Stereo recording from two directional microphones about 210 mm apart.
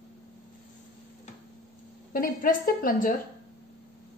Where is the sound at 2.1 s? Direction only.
45° left (ahead or behind).